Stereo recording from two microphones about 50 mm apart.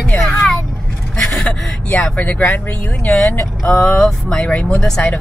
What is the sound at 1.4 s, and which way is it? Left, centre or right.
Speech, centre.